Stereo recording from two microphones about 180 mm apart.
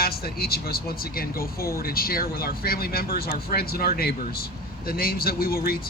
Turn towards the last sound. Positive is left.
turn(degrees=55)  # may be behind; listen again after turning